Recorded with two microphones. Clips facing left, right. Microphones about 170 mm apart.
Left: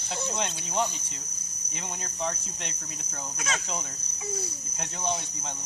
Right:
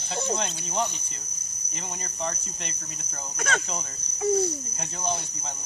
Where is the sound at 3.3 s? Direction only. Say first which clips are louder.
Right 5 dB; 60° right (ahead or behind).